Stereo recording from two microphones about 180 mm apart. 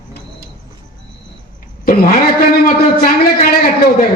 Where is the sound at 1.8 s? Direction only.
50° left (ahead or behind).